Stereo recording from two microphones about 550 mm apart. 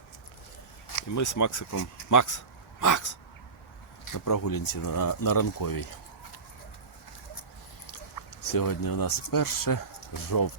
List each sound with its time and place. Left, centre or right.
1.1 s speech: left
8.4 s speech: left